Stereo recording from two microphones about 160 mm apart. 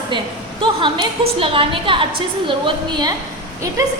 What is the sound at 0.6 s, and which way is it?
A woman's voice, 30° right (ahead or behind).